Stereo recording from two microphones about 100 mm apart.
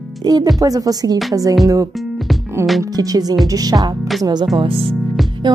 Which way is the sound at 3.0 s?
40° right (ahead or behind).